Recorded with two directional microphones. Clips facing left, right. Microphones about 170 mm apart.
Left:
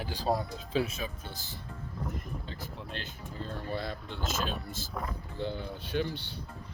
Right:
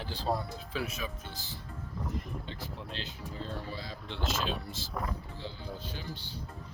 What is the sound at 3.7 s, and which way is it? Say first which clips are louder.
Speech: left 5 dB; 60° left (ahead or behind).